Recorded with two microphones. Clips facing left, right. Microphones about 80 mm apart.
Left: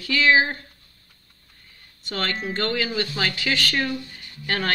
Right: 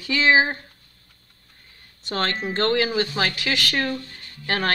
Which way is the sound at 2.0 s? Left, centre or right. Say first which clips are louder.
Right 2 dB; right.